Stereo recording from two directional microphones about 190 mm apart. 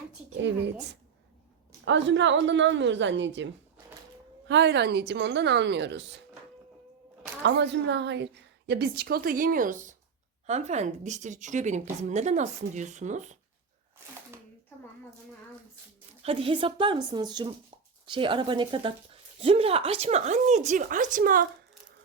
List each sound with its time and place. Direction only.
1.8 s a woman's voice: 75° right (ahead or behind)
4.4 s a woman's voice: 70° right (ahead or behind)
7.4 s a woman's voice: 65° right (ahead or behind); by 13.3 s 40° right (ahead or behind)
16.2 s speech: 30° right (ahead or behind); by 21.4 s 45° right (ahead or behind)